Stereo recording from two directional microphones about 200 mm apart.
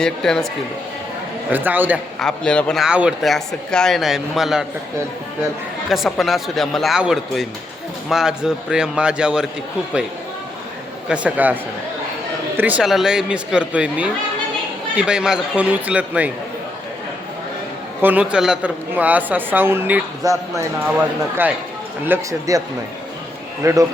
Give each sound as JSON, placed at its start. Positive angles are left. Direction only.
{"t": 0.0, "sound": "speech", "side_deg": 5}
{"t": 1.5, "sound": "a woman's voice", "side_deg": -10}
{"t": 2.1, "sound": "speech", "side_deg": 5}
{"t": 5.9, "sound": "speech", "side_deg": 0}
{"t": 11.1, "sound": "a woman's voice", "side_deg": -5}
{"t": 12.5, "sound": "a woman's voice", "side_deg": -10}
{"t": 18.0, "sound": "a woman's voice", "side_deg": -5}
{"t": 22.0, "sound": "a woman's voice", "side_deg": -15}
{"t": 23.6, "sound": "a woman's voice", "side_deg": -15}